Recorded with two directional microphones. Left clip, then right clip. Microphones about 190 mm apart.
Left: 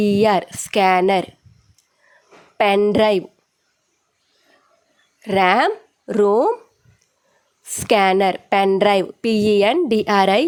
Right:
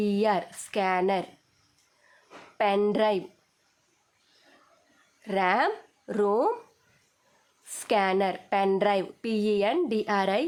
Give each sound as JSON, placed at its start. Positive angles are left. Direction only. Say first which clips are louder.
{"t": 0.0, "sound": "a woman's voice", "louder": "left 10 dB", "side_deg": 40}
{"t": 2.6, "sound": "a woman's voice", "louder": "left 9 dB", "side_deg": 40}
{"t": 5.2, "sound": "speech", "louder": "left 9 dB", "side_deg": 40}
{"t": 7.6, "sound": "a woman's voice", "louder": "left 10 dB", "side_deg": 35}